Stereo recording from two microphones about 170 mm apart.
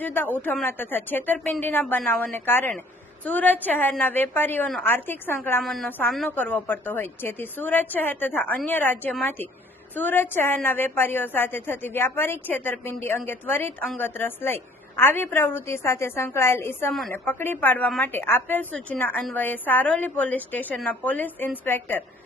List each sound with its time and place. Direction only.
0.0 s a woman's voice: 10° left (ahead or behind)
5.6 s a woman's voice: centre (ahead or behind)